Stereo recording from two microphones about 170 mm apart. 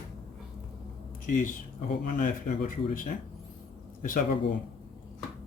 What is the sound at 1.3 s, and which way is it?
Speech, 50° left (ahead or behind).